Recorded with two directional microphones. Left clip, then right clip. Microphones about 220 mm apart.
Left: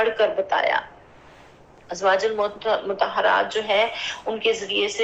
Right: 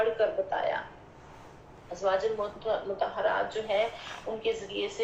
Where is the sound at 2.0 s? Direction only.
20° left (ahead or behind).